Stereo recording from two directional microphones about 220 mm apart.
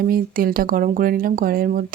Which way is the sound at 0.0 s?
40° right (ahead or behind).